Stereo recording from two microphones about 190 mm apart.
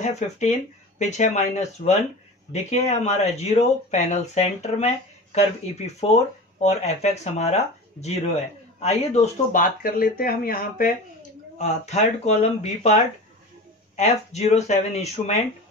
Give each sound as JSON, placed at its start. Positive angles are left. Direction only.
{"t": 0.0, "sound": "speech", "side_deg": 35}
{"t": 11.5, "sound": "speech", "side_deg": 35}
{"t": 13.9, "sound": "speech", "side_deg": 40}